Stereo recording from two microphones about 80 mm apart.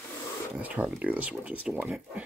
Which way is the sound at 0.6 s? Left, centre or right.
Centre.